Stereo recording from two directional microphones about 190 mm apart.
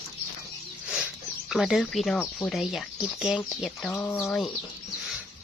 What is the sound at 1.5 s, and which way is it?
Speech, centre (ahead or behind).